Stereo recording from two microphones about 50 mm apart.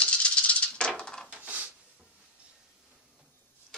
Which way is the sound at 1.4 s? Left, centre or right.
Right.